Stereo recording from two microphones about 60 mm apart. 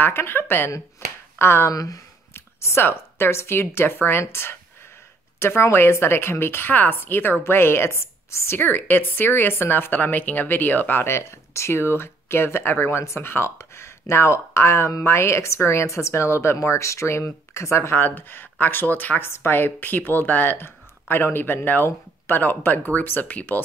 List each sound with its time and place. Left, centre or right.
0.0 s a woman's voice: left
1.7 s speech: left
2.3 s a woman's voice: left
8.5 s a woman's voice: left